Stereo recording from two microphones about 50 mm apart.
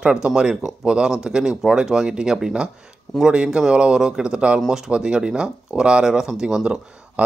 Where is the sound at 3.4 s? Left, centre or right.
Centre.